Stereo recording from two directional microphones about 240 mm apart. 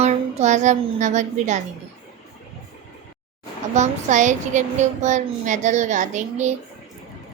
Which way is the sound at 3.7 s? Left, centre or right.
Right.